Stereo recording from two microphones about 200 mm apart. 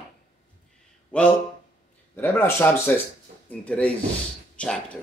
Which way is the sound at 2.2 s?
10° left (ahead or behind).